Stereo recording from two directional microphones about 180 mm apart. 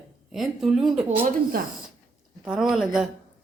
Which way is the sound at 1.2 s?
55° right (ahead or behind).